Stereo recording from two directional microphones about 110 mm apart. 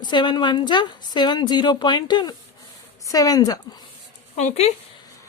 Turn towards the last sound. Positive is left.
turn(degrees=85)